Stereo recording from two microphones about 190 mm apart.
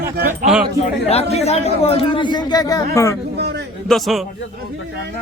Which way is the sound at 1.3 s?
35° left (ahead or behind).